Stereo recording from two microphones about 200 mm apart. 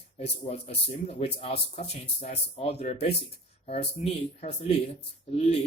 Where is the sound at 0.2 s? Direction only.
30° left (ahead or behind).